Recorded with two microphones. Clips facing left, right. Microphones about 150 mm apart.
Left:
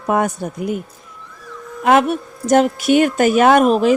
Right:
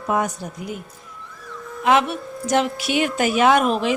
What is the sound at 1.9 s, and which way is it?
A woman's voice, 50° left (ahead or behind).